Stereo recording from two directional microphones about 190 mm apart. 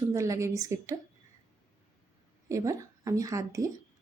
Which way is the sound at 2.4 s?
15° right (ahead or behind).